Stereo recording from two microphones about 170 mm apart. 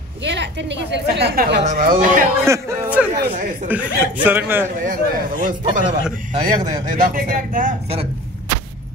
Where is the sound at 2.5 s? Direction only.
10° right (ahead or behind).